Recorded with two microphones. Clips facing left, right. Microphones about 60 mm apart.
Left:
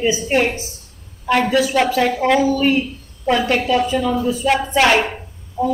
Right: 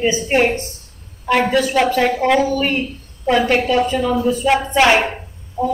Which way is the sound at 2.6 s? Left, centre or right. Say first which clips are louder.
Left 3 dB; centre.